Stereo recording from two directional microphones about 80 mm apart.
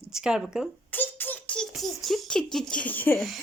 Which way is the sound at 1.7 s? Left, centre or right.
Centre.